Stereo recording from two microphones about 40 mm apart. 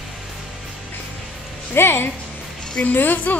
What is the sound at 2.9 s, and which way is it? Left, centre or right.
Speech, left.